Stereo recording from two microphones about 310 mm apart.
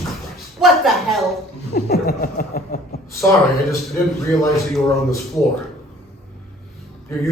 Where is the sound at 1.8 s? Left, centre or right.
Left.